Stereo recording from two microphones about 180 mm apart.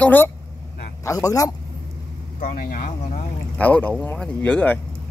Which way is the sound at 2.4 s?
50° left (ahead or behind).